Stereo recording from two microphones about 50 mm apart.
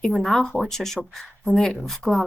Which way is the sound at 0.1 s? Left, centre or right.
Centre.